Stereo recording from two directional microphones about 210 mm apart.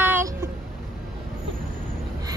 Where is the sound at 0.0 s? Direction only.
10° right (ahead or behind).